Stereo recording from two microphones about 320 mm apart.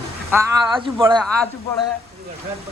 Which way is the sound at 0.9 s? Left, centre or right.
Centre.